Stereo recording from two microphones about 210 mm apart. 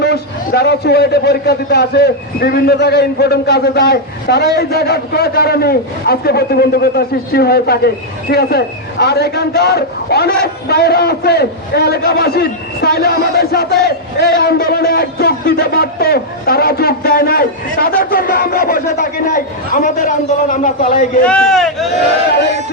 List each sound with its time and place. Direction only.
0.0 s a man's voice: 50° left (ahead or behind)
21.2 s speech: 5° left (ahead or behind)